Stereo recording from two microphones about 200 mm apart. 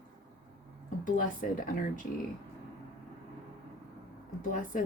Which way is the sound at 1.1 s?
40° left (ahead or behind).